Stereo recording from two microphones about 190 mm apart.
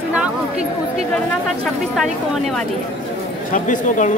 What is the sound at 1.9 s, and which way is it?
Speech, centre (ahead or behind).